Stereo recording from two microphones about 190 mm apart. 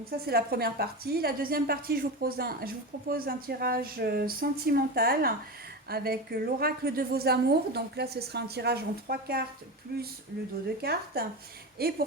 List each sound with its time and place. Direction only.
0.3 s a woman's voice: 55° right (ahead or behind)
10.8 s a woman's voice: 55° right (ahead or behind)